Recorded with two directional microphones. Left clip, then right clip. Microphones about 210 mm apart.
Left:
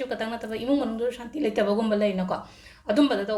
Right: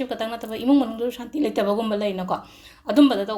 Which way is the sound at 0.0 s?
30° right (ahead or behind).